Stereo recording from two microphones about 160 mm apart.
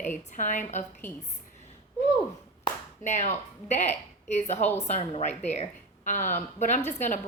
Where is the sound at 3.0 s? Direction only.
45° left (ahead or behind).